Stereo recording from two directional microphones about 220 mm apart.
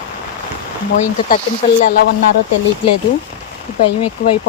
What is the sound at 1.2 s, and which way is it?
Speech, 40° left (ahead or behind).